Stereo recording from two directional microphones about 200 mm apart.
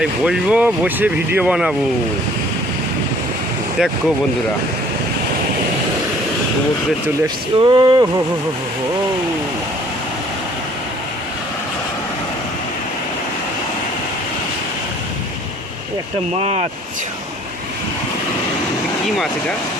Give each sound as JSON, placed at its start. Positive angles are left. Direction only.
{"t": 0.0, "sound": "speech", "side_deg": -5}
{"t": 3.8, "sound": "speech", "side_deg": 0}
{"t": 7.6, "sound": "a sound", "side_deg": -20}
{"t": 16.4, "sound": "speech", "side_deg": -30}
{"t": 19.0, "sound": "speech", "side_deg": 0}